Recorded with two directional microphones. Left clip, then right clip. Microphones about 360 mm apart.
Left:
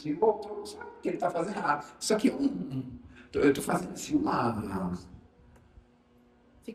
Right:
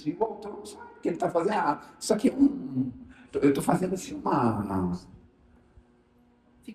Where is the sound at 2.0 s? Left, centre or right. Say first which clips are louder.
Right 6 dB; centre.